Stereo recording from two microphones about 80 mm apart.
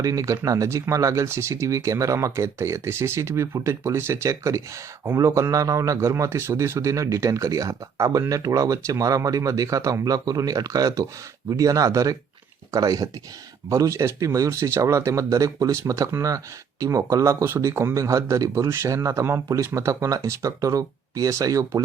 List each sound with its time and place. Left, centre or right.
0.0 s a man's voice: right
13.7 s speech: right
17.5 s speech: right
18.7 s speech: right